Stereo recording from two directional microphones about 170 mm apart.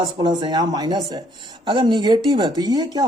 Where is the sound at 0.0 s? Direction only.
25° right (ahead or behind).